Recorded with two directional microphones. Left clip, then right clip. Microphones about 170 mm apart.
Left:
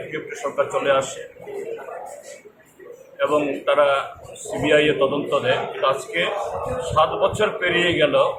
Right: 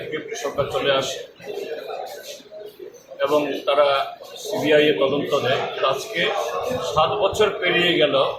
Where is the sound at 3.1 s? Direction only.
Centre (ahead or behind).